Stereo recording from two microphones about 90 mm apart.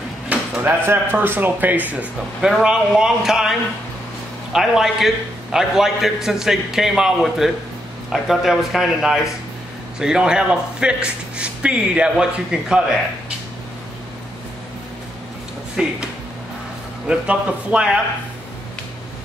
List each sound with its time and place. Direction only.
0.3 s speech: 20° right (ahead or behind)
2.4 s a man's voice: 5° right (ahead or behind)
15.7 s speech: 10° right (ahead or behind)
17.1 s a man's voice: 15° right (ahead or behind)